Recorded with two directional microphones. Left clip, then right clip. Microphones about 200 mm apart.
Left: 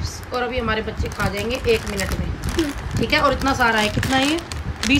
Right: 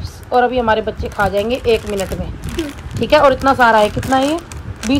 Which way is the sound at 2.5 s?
Centre (ahead or behind).